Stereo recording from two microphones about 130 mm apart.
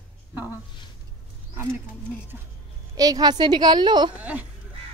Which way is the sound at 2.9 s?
30° right (ahead or behind).